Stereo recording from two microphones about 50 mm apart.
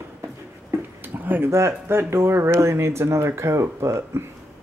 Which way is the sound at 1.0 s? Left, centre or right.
Right.